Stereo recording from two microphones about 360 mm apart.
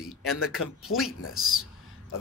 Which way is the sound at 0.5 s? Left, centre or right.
Left.